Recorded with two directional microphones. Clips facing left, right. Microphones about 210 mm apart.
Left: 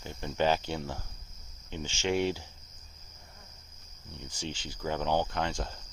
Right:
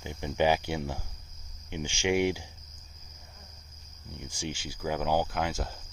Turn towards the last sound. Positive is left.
turn(degrees=-5)  # may be behind; listen again after turning